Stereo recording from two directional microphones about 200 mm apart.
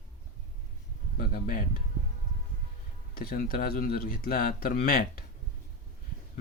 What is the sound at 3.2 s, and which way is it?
Speech, 45° left (ahead or behind).